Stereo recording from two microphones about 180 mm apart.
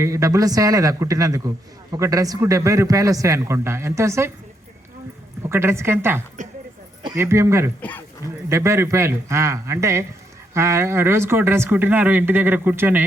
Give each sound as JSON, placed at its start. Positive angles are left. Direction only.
{"t": 0.0, "sound": "a man's voice", "side_deg": -15}
{"t": 5.4, "sound": "a woman's voice", "side_deg": -15}
{"t": 7.8, "sound": "speech", "side_deg": 10}
{"t": 8.4, "sound": "a man's voice", "side_deg": -15}